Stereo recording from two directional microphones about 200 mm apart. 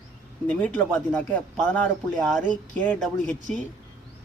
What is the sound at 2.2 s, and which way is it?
Speech, 5° left (ahead or behind).